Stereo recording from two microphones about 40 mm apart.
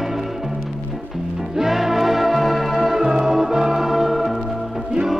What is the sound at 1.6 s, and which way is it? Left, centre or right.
Music, centre.